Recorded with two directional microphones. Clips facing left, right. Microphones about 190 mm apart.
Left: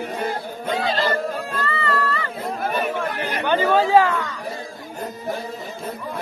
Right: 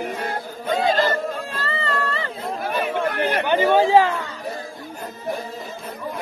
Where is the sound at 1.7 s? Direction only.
30° right (ahead or behind).